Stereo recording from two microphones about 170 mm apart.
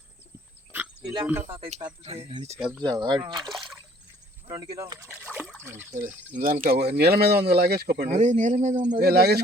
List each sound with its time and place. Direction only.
0.7 s pig: 10° right (ahead or behind)
1.5 s speech: 30° right (ahead or behind)
2.6 s speech: 5° right (ahead or behind)
2.8 s speech: 25° right (ahead or behind)
3.3 s speech: centre (ahead or behind)
4.4 s speech: 20° right (ahead or behind)
5.5 s trickle: 10° right (ahead or behind)
6.3 s speech: 55° right (ahead or behind)
6.9 s speech: 70° right (ahead or behind)
8.0 s speech: 45° right (ahead or behind)
8.9 s speech: 65° right (ahead or behind)